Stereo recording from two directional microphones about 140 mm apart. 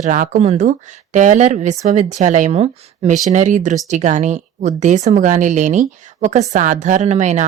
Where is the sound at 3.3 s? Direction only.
60° right (ahead or behind).